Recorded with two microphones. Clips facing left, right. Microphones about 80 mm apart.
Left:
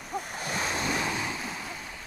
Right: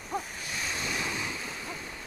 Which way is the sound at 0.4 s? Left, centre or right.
Left.